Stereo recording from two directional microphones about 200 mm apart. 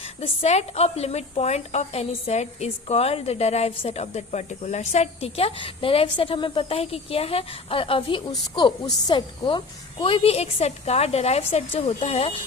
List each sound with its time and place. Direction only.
0.0 s a woman's voice: 35° left (ahead or behind)